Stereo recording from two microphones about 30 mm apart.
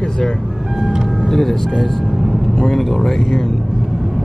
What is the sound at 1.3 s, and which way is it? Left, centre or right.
Speech, centre.